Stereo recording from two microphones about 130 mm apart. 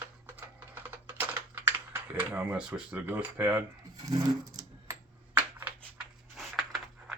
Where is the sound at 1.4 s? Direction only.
15° right (ahead or behind).